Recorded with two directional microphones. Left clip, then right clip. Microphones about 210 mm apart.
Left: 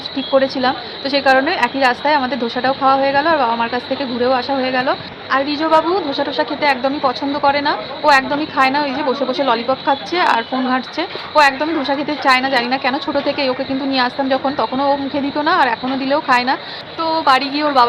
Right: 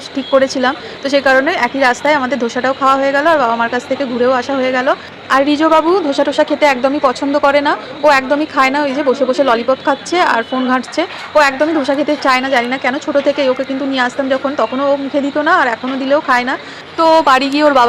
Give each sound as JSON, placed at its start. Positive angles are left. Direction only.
{"t": 0.3, "sound": "a woman's voice", "side_deg": -20}
{"t": 5.3, "sound": "a woman's voice", "side_deg": -35}
{"t": 17.0, "sound": "a woman's voice", "side_deg": -35}